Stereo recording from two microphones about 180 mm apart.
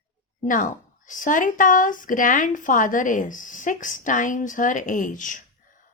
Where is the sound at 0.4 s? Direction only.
45° left (ahead or behind).